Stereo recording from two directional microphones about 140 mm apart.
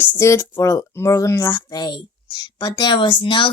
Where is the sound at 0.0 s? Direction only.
20° left (ahead or behind).